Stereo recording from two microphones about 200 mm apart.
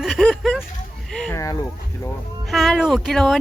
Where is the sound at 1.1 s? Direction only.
Centre (ahead or behind).